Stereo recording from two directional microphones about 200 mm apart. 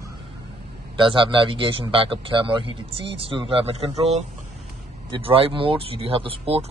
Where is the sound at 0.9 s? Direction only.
25° right (ahead or behind).